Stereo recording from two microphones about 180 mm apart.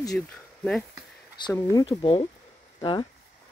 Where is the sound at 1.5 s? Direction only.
20° left (ahead or behind).